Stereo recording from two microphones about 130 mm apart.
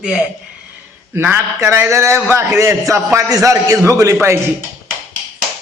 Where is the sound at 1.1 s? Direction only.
15° right (ahead or behind).